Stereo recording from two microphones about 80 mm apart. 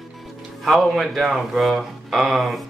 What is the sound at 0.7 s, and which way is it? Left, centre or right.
A man's voice, centre.